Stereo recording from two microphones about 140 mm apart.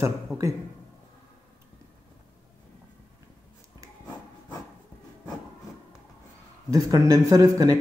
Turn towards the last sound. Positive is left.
turn(degrees=-25)  # may be behind; listen again after turning